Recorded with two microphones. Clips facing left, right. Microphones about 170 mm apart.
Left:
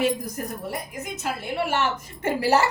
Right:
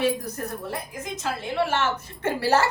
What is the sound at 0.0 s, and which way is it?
A woman's voice, 10° left (ahead or behind).